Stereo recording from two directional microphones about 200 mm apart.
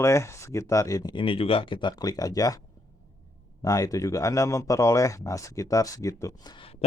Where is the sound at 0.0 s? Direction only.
15° left (ahead or behind).